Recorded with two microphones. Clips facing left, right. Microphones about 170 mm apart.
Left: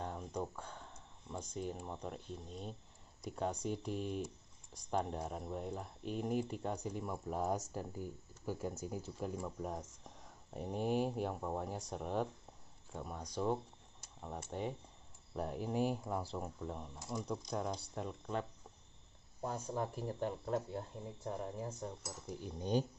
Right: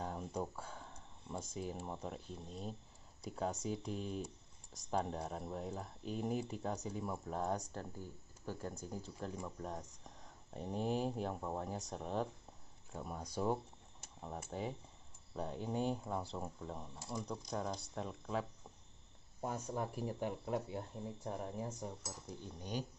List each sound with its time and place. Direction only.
0.0 s a sound: 5° right (ahead or behind)
1.3 s speech: 5° right (ahead or behind)
22.6 s speech: 30° left (ahead or behind)